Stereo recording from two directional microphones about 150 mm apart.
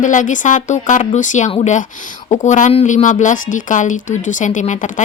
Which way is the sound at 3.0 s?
55° left (ahead or behind).